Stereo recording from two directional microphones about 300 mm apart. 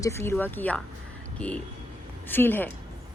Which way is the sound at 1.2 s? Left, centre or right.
Centre.